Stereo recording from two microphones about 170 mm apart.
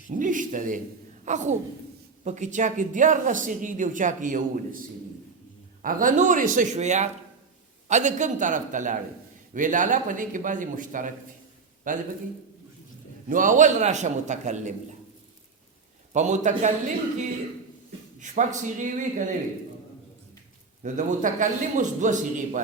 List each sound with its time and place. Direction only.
0.2 s a woman's voice: 50° right (ahead or behind)
5.8 s speech: 55° right (ahead or behind)
13.2 s speech: 50° right (ahead or behind)
16.1 s speech: 45° right (ahead or behind)
18.2 s speech: 45° right (ahead or behind)
20.8 s speech: 45° right (ahead or behind)